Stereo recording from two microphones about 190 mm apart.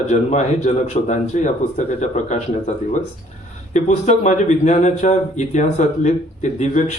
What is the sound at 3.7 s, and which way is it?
Speech, 40° left (ahead or behind).